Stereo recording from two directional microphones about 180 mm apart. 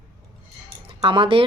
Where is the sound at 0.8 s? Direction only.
25° right (ahead or behind).